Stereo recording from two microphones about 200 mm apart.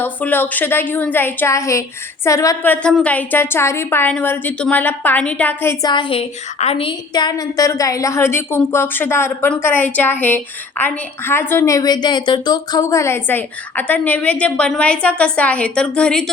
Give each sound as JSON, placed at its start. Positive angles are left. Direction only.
{"t": 0.0, "sound": "speech", "side_deg": 10}
{"t": 5.9, "sound": "speech", "side_deg": 25}